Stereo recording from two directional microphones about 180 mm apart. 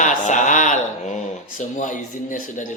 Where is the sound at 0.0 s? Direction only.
45° left (ahead or behind).